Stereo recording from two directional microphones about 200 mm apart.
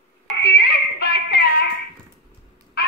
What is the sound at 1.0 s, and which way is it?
Music, 55° left (ahead or behind).